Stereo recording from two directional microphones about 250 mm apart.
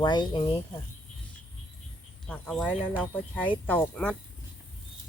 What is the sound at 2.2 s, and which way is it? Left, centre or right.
Speech, centre.